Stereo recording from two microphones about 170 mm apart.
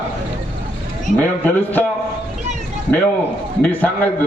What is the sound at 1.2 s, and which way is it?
Speech, 10° left (ahead or behind).